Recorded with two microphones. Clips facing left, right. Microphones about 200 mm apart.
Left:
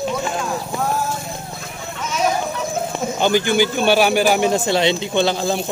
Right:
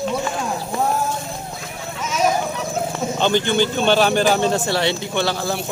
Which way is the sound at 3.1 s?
10° left (ahead or behind).